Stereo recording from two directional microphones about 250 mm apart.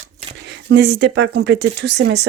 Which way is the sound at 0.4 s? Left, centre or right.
Right.